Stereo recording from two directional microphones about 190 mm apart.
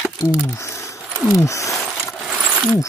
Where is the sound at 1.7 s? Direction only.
Centre (ahead or behind).